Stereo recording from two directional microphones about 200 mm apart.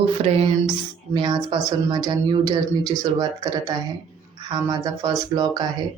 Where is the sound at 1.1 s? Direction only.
25° right (ahead or behind).